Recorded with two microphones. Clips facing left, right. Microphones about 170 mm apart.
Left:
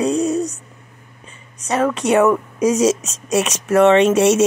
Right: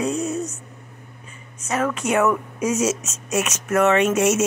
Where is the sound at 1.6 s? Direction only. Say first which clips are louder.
Left 5 dB; 35° left (ahead or behind).